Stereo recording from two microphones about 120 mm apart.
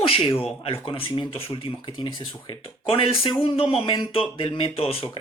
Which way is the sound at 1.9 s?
40° left (ahead or behind).